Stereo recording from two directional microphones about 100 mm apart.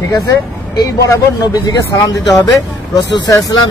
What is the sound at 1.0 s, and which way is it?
Speech, 40° left (ahead or behind).